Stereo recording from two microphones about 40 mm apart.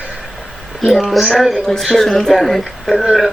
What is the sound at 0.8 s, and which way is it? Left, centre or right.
Speech, centre.